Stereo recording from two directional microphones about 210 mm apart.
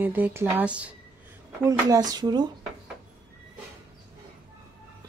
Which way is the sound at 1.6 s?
15° right (ahead or behind).